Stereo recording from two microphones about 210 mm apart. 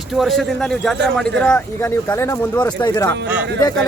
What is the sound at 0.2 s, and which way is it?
Speech, centre (ahead or behind).